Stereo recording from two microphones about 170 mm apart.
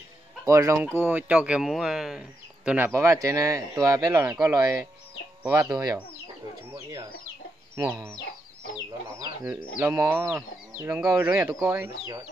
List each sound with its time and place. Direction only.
0.5 s speech: 15° right (ahead or behind)
7.7 s chicken: 15° right (ahead or behind)
9.8 s speech: 15° right (ahead or behind)